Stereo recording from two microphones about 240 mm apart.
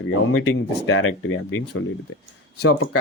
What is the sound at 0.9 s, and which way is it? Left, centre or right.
Speech, left.